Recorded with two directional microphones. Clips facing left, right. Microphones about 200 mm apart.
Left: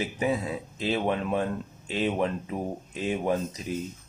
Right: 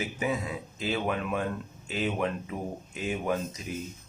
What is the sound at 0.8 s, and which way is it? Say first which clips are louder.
Speech: left 3 dB; 35° left (ahead or behind).